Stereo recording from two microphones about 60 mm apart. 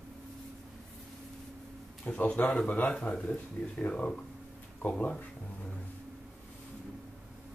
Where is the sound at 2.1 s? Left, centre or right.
Left.